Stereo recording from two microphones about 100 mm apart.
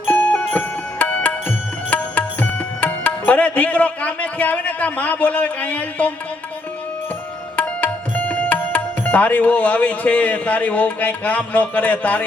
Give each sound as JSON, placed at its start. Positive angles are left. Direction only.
{"t": 0.1, "sound": "music", "side_deg": 15}
{"t": 7.5, "sound": "tabla", "side_deg": 15}